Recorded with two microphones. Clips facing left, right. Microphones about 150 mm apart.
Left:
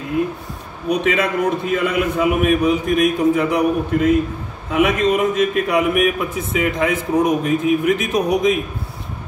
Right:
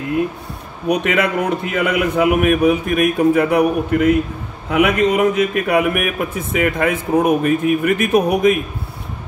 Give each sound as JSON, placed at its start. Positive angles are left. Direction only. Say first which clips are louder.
{"t": 0.8, "sound": "a man's voice", "louder": "right 1 dB", "side_deg": -65}